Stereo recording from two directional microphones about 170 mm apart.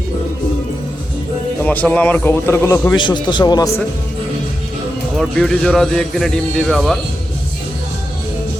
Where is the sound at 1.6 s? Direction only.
10° left (ahead or behind).